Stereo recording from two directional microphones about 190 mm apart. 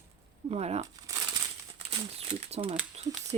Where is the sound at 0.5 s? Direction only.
35° right (ahead or behind).